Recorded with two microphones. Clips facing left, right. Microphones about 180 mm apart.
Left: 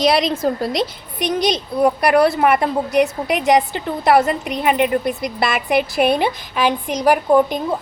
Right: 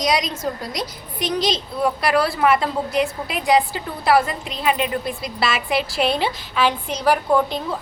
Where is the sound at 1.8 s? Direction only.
55° left (ahead or behind).